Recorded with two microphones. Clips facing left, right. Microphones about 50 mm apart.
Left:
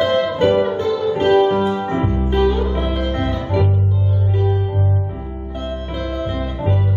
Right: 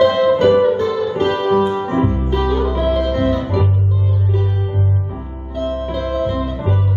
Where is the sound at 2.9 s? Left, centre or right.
Left.